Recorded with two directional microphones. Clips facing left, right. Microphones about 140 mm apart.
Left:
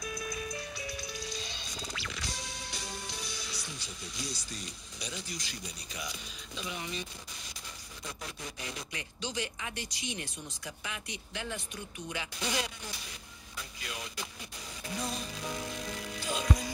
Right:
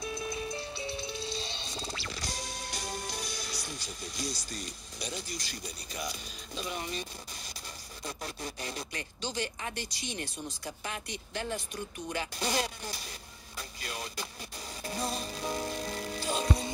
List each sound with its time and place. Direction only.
0.0 s music: 30° right (ahead or behind)
8.0 s speech: 35° right (ahead or behind)
14.8 s music: 35° right (ahead or behind)